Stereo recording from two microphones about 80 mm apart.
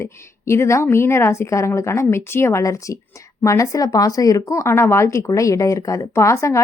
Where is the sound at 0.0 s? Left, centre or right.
Left.